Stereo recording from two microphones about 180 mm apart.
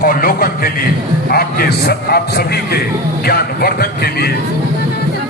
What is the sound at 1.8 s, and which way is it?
Speech, 60° left (ahead or behind).